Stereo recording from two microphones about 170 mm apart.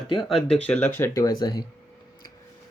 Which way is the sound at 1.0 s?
20° left (ahead or behind).